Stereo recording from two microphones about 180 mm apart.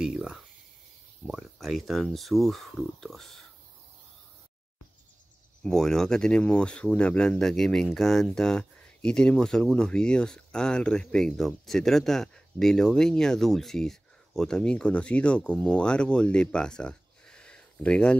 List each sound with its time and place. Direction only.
0.0 s a sound: 5° right (ahead or behind)
1.2 s speech: centre (ahead or behind)
5.6 s speech: 5° left (ahead or behind)